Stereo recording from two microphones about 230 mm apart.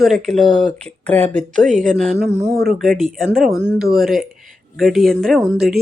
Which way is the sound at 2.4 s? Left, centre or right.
Right.